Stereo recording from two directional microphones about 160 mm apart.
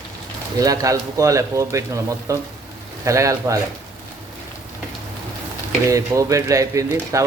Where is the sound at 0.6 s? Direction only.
20° right (ahead or behind).